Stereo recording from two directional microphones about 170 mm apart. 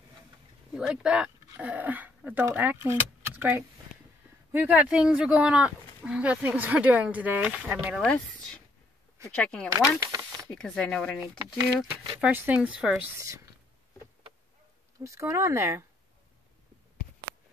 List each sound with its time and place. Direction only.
0.7 s speech: 5° right (ahead or behind)
9.3 s speech: 5° left (ahead or behind)
9.9 s a sound: 20° right (ahead or behind)
10.5 s speech: 5° left (ahead or behind)
11.9 s speech: 10° right (ahead or behind)
15.0 s speech: 15° right (ahead or behind)